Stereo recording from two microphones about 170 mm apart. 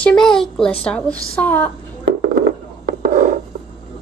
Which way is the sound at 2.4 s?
55° right (ahead or behind).